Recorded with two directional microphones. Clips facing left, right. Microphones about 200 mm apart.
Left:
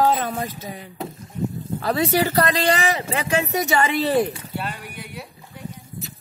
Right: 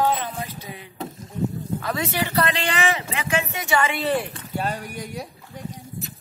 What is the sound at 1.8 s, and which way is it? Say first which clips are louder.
Speech: left 8 dB; 35° left (ahead or behind).